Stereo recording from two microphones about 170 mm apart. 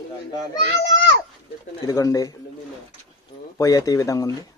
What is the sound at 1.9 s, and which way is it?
Speech, 20° left (ahead or behind).